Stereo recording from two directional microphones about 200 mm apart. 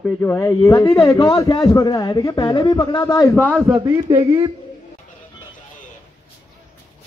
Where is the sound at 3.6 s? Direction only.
15° right (ahead or behind).